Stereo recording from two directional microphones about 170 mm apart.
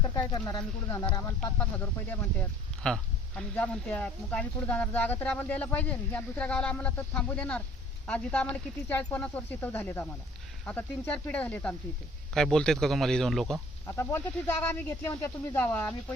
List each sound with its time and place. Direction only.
0.2 s speech: 20° left (ahead or behind); by 13.9 s centre (ahead or behind)
13.9 s speech: 15° left (ahead or behind)